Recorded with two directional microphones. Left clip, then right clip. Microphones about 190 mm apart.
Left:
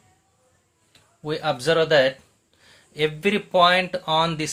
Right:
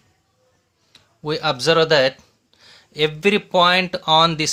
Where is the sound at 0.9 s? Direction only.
30° right (ahead or behind).